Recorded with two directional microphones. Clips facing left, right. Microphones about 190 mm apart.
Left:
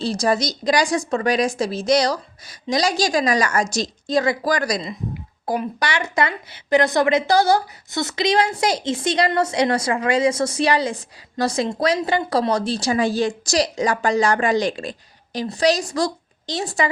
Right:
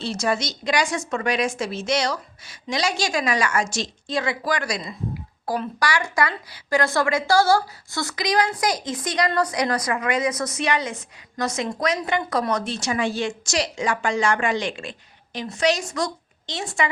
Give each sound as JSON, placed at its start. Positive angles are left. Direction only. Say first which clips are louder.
{"t": 0.0, "sound": "speech", "louder": "left 4 dB", "side_deg": 35}
{"t": 5.5, "sound": "speech", "louder": "left 1 dB", "side_deg": 20}